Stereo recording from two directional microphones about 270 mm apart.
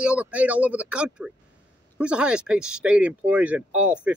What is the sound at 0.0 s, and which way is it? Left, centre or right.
Speech, centre.